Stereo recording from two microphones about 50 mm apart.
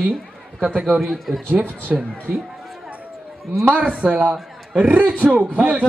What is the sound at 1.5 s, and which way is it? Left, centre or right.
Speech, right.